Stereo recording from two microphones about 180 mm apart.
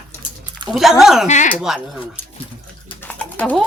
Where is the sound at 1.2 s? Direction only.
40° left (ahead or behind).